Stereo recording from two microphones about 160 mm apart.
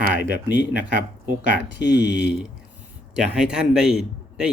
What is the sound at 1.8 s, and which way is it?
Speech, 90° left.